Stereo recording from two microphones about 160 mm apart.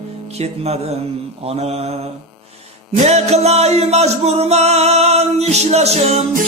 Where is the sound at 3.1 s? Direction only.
40° right (ahead or behind).